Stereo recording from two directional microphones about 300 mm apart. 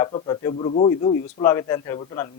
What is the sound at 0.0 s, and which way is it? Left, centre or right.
A man's voice, centre.